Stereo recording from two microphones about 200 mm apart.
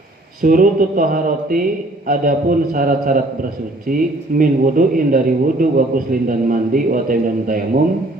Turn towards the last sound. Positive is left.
turn(degrees=-45)  # may be behind; listen again after turning